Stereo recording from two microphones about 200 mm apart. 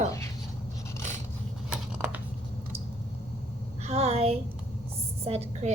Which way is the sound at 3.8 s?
30° right (ahead or behind).